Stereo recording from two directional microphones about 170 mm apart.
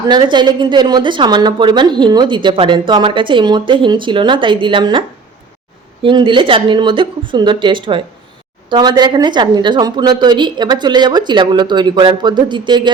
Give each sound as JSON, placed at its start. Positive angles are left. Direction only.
{"t": 0.1, "sound": "a woman's voice", "side_deg": -25}